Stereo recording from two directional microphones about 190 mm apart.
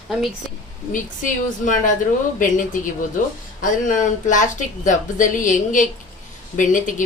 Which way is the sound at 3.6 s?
40° left (ahead or behind).